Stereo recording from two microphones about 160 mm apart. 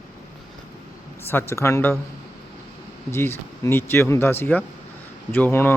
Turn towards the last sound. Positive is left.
turn(degrees=15)  # may be behind; listen again after turning